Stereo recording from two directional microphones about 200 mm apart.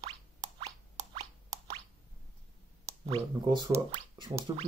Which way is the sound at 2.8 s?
20° right (ahead or behind).